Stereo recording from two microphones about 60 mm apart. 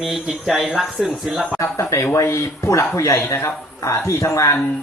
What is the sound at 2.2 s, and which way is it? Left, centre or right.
Speech, left.